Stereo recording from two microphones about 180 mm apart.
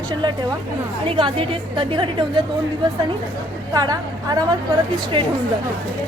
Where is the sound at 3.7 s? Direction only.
20° right (ahead or behind).